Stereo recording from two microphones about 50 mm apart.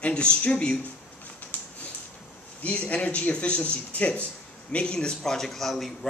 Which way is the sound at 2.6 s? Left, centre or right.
Left.